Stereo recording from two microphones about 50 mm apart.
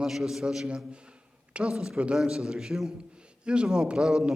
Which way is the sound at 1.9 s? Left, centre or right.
Right.